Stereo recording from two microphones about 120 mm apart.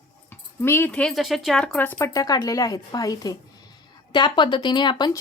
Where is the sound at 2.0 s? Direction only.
30° left (ahead or behind).